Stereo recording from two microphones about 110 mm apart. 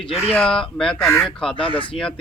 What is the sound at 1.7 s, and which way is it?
Speech, 50° left (ahead or behind).